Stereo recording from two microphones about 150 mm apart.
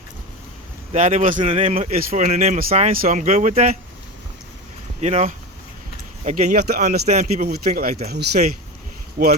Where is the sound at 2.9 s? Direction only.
60° right (ahead or behind).